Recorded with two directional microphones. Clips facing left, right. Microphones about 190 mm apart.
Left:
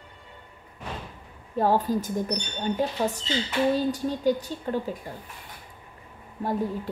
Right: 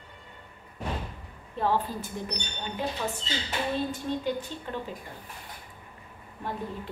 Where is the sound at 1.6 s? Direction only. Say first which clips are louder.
Left 5 dB; 40° left (ahead or behind).